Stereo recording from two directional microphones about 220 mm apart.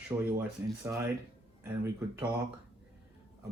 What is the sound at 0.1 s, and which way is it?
Speech, 20° right (ahead or behind).